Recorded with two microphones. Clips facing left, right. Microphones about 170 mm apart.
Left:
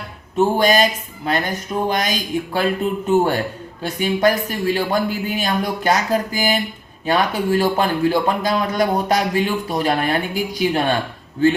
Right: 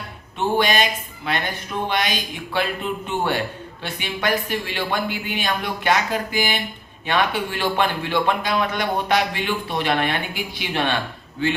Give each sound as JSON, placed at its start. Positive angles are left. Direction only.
{"t": 0.3, "sound": "a man's voice", "side_deg": 40}